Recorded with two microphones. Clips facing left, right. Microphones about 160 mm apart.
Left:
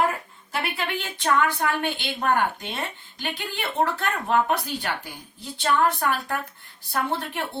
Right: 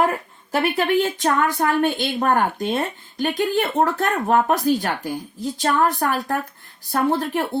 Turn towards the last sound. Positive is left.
turn(degrees=-40)  # may be behind; listen again after turning